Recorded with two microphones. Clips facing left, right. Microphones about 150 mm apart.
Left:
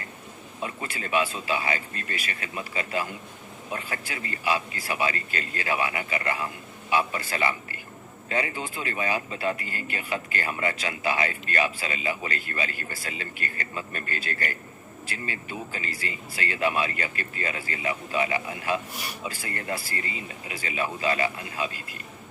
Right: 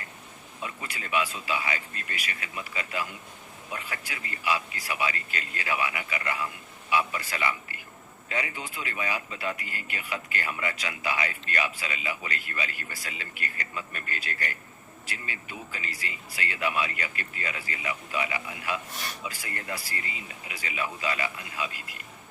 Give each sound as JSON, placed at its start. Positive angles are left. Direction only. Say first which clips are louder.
{"t": 0.6, "sound": "speech", "louder": "left 4 dB", "side_deg": 35}